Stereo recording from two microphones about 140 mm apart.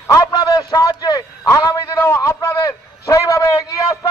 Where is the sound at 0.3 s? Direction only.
30° left (ahead or behind).